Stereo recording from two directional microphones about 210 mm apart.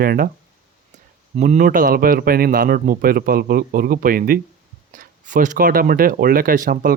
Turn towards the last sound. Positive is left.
turn(degrees=-40)  # may be behind; listen again after turning